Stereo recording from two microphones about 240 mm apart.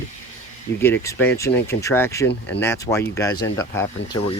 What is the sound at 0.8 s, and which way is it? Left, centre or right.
Speech, centre.